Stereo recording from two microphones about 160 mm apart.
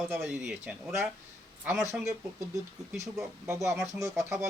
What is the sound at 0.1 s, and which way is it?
Speech, 5° right (ahead or behind).